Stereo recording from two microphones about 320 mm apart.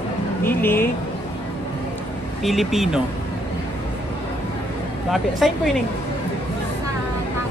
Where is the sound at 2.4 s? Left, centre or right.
Centre.